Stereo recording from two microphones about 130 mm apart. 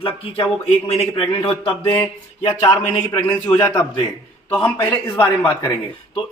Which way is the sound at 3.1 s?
15° left (ahead or behind).